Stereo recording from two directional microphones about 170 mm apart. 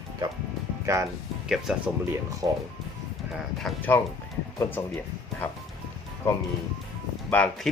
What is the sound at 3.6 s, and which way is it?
Speech, 10° left (ahead or behind).